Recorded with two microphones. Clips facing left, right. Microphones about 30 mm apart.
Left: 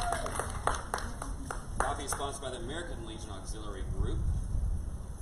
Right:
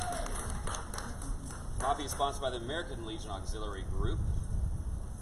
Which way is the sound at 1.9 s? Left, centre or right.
Centre.